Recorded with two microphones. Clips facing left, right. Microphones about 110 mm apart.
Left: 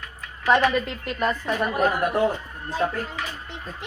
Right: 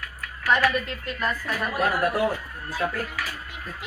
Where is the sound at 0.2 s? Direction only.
25° left (ahead or behind).